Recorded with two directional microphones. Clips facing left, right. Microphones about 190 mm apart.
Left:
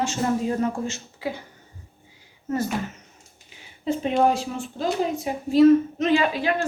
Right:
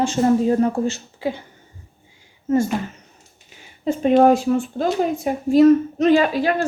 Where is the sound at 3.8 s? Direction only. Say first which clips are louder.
Right 7 dB; 50° right (ahead or behind).